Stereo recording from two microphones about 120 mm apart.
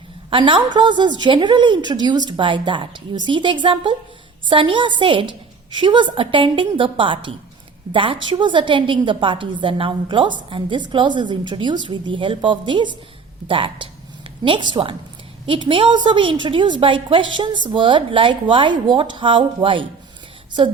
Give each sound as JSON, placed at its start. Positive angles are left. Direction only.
{"t": 0.3, "sound": "a woman's voice", "side_deg": -45}